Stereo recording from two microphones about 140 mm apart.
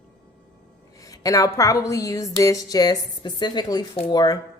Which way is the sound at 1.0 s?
25° left (ahead or behind).